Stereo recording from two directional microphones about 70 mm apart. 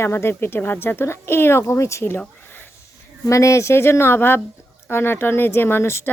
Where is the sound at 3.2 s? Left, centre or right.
Left.